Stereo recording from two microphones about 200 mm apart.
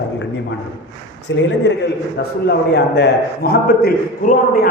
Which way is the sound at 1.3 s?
65° left (ahead or behind).